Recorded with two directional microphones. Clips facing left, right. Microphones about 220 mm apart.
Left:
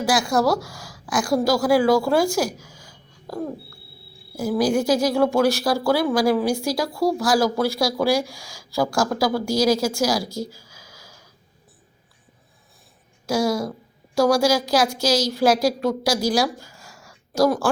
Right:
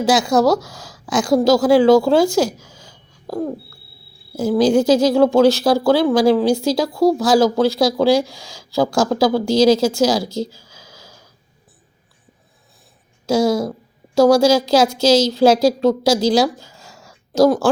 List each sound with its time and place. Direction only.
0.0 s speech: 20° right (ahead or behind)
4.4 s speech: 20° right (ahead or behind)
13.2 s speech: 25° right (ahead or behind)